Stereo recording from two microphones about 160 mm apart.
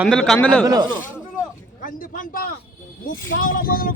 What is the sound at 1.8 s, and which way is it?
Speech, 60° left (ahead or behind).